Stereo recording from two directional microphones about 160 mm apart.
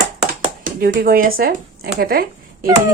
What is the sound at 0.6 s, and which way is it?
Speech, 65° right (ahead or behind).